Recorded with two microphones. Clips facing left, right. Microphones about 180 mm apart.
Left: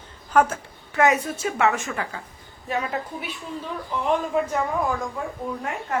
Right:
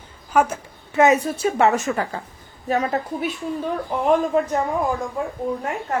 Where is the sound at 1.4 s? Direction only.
35° right (ahead or behind).